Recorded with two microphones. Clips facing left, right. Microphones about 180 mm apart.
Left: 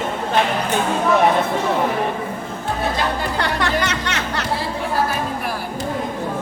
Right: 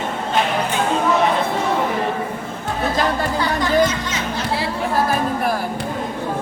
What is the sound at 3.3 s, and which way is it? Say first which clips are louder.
Music: right 6 dB; 70° left (ahead or behind).